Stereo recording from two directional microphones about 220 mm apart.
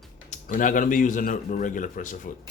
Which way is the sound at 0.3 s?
35° left (ahead or behind).